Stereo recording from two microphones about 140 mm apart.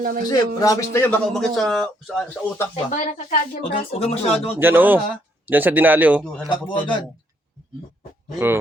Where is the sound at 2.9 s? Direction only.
65° left (ahead or behind); by 4.5 s 45° left (ahead or behind).